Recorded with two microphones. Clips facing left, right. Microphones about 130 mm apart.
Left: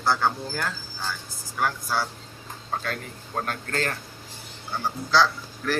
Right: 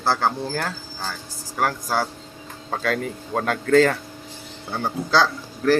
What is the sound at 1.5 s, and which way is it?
Speech, 45° right (ahead or behind).